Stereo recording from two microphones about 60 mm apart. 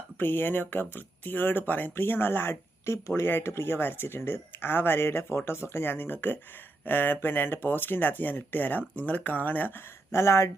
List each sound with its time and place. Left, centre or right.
0.2 s speech: left
10.1 s speech: left